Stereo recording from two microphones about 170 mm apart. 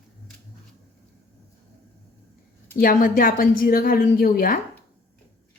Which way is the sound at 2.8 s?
55° left (ahead or behind).